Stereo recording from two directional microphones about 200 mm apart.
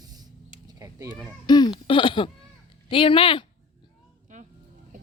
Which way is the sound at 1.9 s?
25° left (ahead or behind).